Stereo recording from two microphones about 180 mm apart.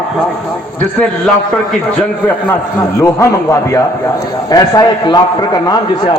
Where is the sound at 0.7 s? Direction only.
5° left (ahead or behind); by 6.1 s 20° left (ahead or behind).